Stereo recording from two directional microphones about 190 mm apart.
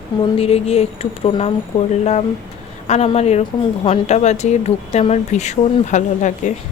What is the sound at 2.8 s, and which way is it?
Speech, 35° left (ahead or behind).